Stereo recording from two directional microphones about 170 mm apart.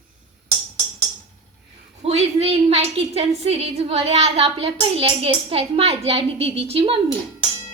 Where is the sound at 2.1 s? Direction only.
35° right (ahead or behind).